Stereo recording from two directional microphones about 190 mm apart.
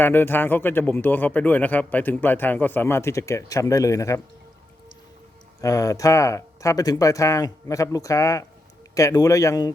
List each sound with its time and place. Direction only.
0.0 s speech: 10° left (ahead or behind)
5.5 s speech: 15° left (ahead or behind)